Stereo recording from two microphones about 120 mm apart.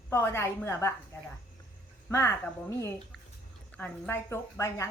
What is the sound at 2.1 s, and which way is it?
Speech, 20° left (ahead or behind).